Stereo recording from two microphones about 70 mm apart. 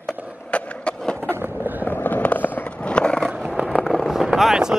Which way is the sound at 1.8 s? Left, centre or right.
Left.